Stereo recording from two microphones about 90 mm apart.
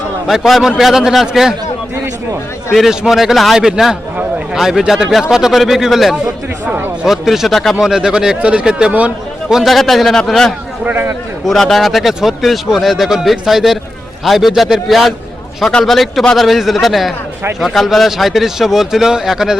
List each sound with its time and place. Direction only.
0.3 s speech: centre (ahead or behind)
2.7 s speech: 5° right (ahead or behind)
6.7 s a sound: 20° right (ahead or behind)
7.0 s speech: 5° right (ahead or behind)
9.6 s speech: centre (ahead or behind)
10.8 s a man's voice: 20° right (ahead or behind)
11.4 s speech: 5° left (ahead or behind)